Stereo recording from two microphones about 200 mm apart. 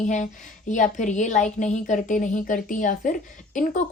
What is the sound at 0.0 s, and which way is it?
A woman's voice, 40° left (ahead or behind).